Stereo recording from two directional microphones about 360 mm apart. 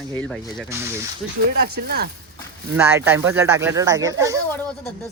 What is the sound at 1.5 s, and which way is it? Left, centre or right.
Speech, right.